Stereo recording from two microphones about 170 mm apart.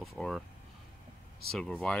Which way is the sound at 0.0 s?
Centre (ahead or behind).